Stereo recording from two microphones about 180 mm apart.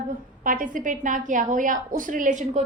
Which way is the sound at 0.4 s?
50° right (ahead or behind).